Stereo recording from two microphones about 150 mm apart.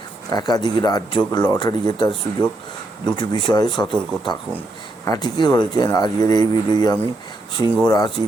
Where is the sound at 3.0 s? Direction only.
30° left (ahead or behind).